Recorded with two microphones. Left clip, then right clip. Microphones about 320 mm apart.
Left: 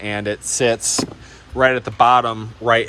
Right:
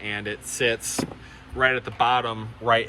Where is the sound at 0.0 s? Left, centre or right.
Centre.